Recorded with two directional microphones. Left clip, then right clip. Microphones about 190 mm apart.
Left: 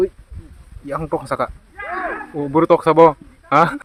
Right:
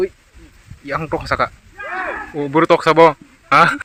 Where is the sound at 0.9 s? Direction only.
5° left (ahead or behind).